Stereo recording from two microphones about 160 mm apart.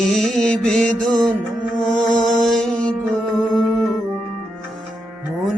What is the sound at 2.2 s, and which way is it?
Mantra, centre (ahead or behind).